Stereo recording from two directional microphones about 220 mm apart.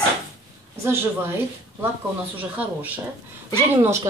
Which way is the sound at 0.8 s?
10° right (ahead or behind).